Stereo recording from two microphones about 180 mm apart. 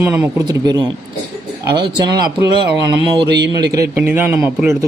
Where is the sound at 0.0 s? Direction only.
15° right (ahead or behind).